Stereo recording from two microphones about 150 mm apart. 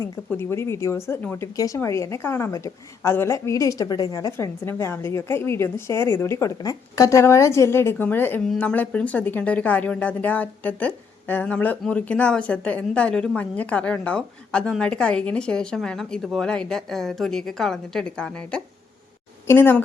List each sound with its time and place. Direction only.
0.3 s a woman's voice: 15° left (ahead or behind)